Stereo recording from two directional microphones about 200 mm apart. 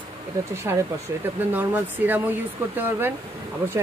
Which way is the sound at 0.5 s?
15° right (ahead or behind).